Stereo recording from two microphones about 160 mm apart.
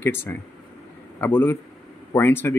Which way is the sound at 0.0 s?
15° left (ahead or behind).